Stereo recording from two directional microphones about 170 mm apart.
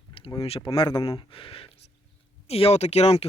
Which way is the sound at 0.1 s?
30° left (ahead or behind).